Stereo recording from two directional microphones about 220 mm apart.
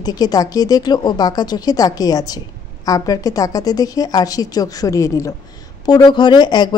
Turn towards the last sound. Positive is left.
turn(degrees=20)  # may be behind; listen again after turning